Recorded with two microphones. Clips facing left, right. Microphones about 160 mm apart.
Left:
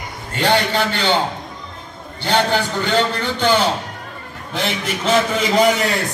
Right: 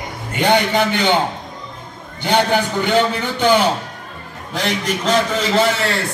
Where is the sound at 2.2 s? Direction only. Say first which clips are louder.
Right 2 dB; 10° right (ahead or behind).